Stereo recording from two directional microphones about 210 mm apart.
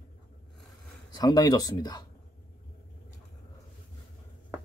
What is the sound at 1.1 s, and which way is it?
Speech, 20° left (ahead or behind).